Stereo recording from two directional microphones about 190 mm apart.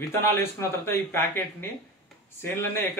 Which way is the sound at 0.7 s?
10° left (ahead or behind).